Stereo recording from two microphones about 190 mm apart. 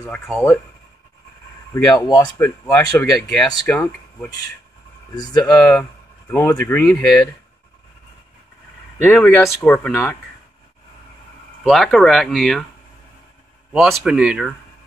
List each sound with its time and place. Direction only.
0.0 s speech: 10° left (ahead or behind)
1.7 s speech: 20° left (ahead or behind)
2.7 s speech: 5° left (ahead or behind)
8.9 s speech: 10° left (ahead or behind)
11.6 s speech: centre (ahead or behind)
13.7 s speech: centre (ahead or behind)